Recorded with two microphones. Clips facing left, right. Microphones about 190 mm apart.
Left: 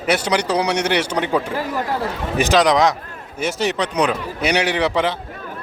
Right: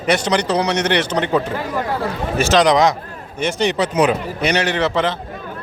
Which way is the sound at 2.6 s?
Centre (ahead or behind).